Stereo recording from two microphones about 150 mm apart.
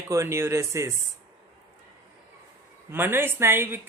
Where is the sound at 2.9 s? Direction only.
15° right (ahead or behind).